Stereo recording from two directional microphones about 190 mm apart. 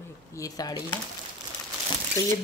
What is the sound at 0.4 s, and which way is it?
Speech, 20° left (ahead or behind).